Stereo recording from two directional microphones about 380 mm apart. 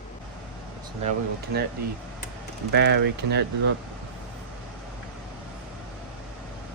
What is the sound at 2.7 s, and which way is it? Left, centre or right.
Speech, right.